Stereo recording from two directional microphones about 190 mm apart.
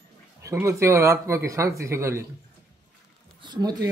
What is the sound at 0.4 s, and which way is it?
Speech, 15° right (ahead or behind).